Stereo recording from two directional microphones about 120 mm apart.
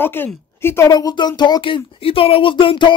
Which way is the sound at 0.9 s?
35° left (ahead or behind).